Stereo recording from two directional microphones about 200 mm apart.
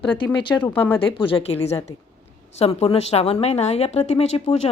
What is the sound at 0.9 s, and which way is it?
Speech, 25° left (ahead or behind).